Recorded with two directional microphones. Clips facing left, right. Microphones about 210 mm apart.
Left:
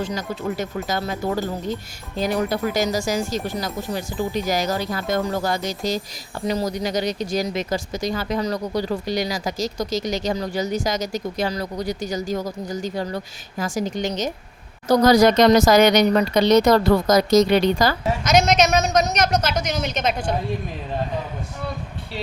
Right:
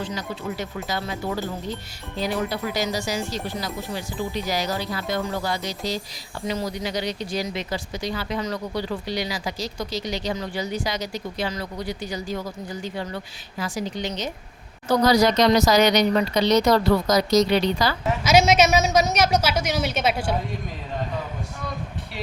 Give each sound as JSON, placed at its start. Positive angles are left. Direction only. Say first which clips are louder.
{"t": 0.0, "sound": "speech", "louder": "left 4 dB", "side_deg": 45}
{"t": 18.2, "sound": "a woman's voice", "louder": "right 1 dB", "side_deg": -5}